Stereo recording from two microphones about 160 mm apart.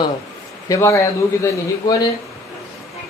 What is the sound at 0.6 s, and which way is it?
Speech, 20° left (ahead or behind).